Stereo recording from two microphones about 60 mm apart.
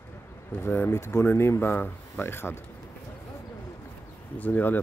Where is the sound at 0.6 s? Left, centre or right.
Left.